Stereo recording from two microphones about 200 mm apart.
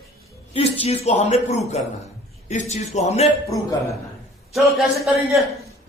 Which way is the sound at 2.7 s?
35° left (ahead or behind).